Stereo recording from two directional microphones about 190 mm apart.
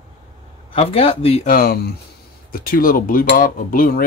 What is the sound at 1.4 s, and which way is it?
Speech, 50° left (ahead or behind).